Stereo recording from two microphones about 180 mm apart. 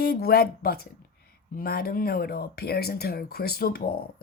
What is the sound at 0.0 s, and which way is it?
Speech, 60° left (ahead or behind).